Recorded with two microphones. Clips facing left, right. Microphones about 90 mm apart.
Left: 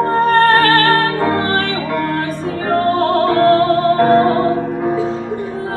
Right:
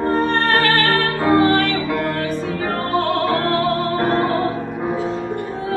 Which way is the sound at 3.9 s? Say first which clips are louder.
Left 9 dB; 25° left (ahead or behind).